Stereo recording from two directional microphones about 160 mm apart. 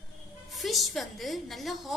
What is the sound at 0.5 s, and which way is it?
A woman's voice, centre (ahead or behind).